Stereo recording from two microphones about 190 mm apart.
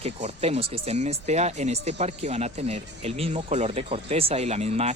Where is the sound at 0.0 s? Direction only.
35° right (ahead or behind).